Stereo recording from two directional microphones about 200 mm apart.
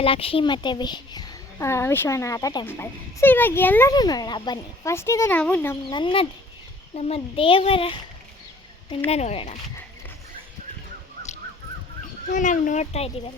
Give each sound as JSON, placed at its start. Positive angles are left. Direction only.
{"t": 0.0, "sound": "a woman's voice", "side_deg": 30}
{"t": 5.9, "sound": "a child's voice", "side_deg": 25}
{"t": 9.0, "sound": "a child's voice", "side_deg": 30}
{"t": 12.3, "sound": "a child's voice", "side_deg": 40}